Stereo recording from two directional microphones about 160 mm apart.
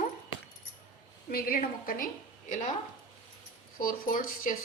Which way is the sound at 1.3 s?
65° left (ahead or behind).